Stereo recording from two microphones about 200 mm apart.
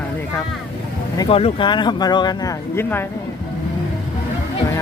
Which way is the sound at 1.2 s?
30° left (ahead or behind).